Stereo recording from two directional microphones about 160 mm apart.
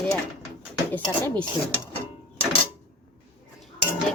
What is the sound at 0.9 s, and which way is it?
Speech, 10° left (ahead or behind).